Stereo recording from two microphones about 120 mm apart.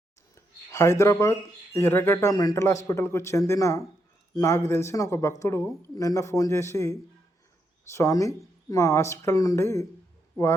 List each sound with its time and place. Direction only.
0.3 s speech: 25° left (ahead or behind)
7.9 s speech: 25° left (ahead or behind)